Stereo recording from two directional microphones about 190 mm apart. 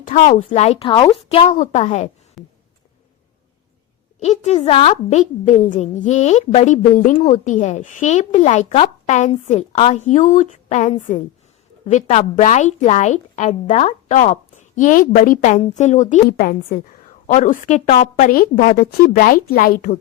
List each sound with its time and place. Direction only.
0.0 s a woman's voice: 40° left (ahead or behind); by 1.5 s 25° left (ahead or behind)
1.5 s a woman's voice: 40° left (ahead or behind)
2.4 s a sound: centre (ahead or behind)
4.2 s a woman's voice: 35° left (ahead or behind); by 20.0 s 50° left (ahead or behind)